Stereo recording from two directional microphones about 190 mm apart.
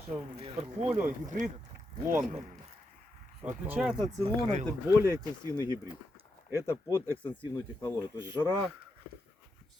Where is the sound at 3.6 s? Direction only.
5° right (ahead or behind).